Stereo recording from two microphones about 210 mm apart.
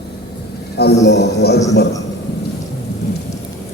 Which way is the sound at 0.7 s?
55° left (ahead or behind).